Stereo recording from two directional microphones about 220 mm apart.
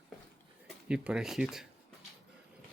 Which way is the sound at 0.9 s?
5° right (ahead or behind).